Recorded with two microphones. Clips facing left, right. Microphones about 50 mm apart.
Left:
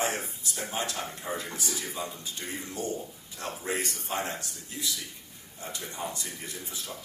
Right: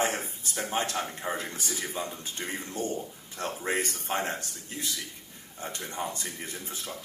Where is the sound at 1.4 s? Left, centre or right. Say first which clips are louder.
Right 1 dB; right.